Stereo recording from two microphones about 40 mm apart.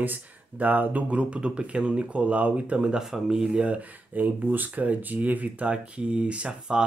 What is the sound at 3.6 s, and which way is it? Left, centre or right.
Speech, right.